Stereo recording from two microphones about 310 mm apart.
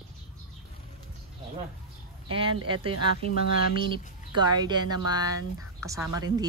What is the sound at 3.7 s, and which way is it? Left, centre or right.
Speech, centre.